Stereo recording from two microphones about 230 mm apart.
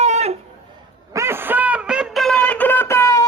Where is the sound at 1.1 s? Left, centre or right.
Centre.